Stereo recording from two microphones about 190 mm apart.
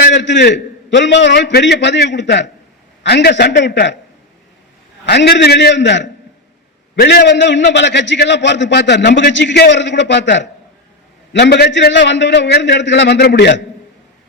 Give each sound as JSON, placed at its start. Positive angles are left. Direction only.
{"t": 0.0, "sound": "a man's voice", "side_deg": 70}
{"t": 5.0, "sound": "a man's voice", "side_deg": 60}